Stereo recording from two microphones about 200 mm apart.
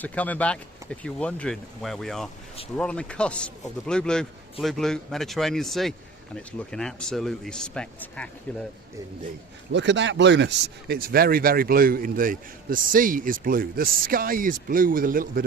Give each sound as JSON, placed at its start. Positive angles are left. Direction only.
{"t": 0.0, "sound": "speech", "side_deg": 5}
{"t": 9.7, "sound": "speech", "side_deg": -60}